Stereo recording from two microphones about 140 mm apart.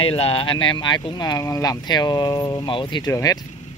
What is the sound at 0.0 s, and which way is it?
Speech, 45° left (ahead or behind).